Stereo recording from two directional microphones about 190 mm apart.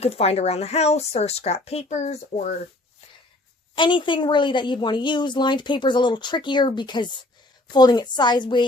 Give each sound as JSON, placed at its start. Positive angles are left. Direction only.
{"t": 0.0, "sound": "speech", "side_deg": 35}
{"t": 3.8, "sound": "a woman's voice", "side_deg": 25}